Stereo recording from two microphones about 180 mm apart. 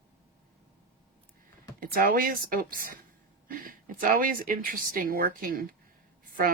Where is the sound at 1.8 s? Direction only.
50° right (ahead or behind).